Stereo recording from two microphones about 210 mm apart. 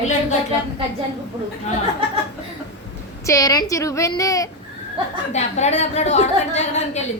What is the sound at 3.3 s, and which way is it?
A woman's voice, 15° left (ahead or behind).